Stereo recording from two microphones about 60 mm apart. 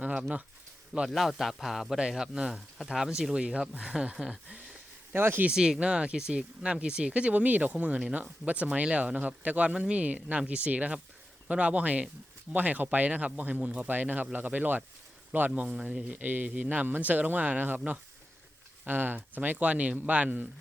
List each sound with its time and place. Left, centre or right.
0.0 s a sound: centre
1.0 s speech: centre
4.4 s a sound: centre
5.1 s speech: right
5.5 s speech: centre
15.7 s speech: centre
16.1 s speech: right
18.9 s speech: right